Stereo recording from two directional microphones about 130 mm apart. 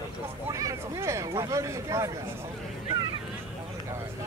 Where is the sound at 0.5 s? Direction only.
25° right (ahead or behind).